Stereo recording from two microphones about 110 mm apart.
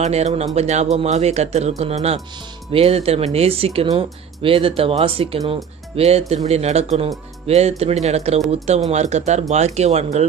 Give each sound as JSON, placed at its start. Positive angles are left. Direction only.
{"t": 0.0, "sound": "speech", "side_deg": -85}
{"t": 0.6, "sound": "speech", "side_deg": -90}
{"t": 1.8, "sound": "speech", "side_deg": -70}
{"t": 5.9, "sound": "speech", "side_deg": -70}
{"t": 8.9, "sound": "speech", "side_deg": -90}